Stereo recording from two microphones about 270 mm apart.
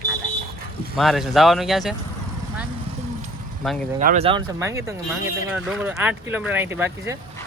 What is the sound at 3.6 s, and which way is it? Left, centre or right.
Speech, centre.